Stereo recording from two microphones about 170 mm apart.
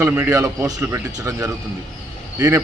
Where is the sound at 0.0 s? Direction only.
15° right (ahead or behind).